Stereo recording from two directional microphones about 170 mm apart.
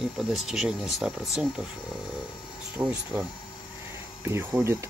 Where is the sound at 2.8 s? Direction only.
5° right (ahead or behind).